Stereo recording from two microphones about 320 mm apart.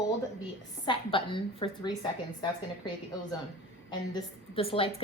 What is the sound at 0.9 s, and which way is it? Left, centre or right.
Humming, centre.